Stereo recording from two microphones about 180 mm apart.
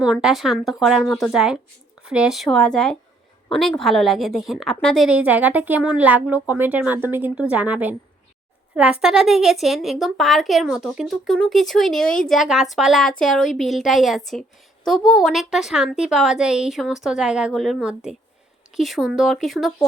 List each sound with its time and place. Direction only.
0.0 s a woman's voice: 5° right (ahead or behind)
1.3 s a woman's voice: 5° right (ahead or behind)
5.0 s a woman's voice: 10° right (ahead or behind)